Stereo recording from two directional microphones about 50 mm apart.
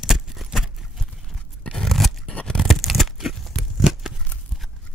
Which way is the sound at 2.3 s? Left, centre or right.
Centre.